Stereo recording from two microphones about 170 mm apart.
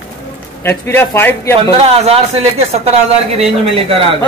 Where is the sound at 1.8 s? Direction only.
35° right (ahead or behind).